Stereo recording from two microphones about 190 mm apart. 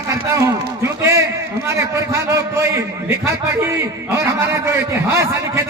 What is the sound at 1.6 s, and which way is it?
Speech, 15° right (ahead or behind).